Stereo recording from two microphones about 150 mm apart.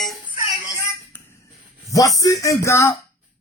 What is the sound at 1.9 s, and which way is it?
Speech, 25° left (ahead or behind).